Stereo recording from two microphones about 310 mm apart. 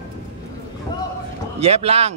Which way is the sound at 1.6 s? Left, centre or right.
Centre.